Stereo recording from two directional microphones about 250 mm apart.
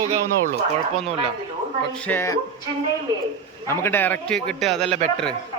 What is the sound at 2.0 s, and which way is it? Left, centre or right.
Speech, centre.